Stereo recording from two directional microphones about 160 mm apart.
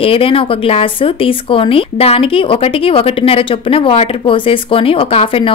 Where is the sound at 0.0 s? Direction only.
35° left (ahead or behind).